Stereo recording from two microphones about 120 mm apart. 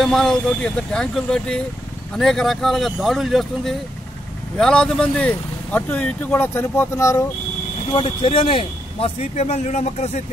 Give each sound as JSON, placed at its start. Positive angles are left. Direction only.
{"t": 0.0, "sound": "speech", "side_deg": 5}
{"t": 7.9, "sound": "a man's voice", "side_deg": 45}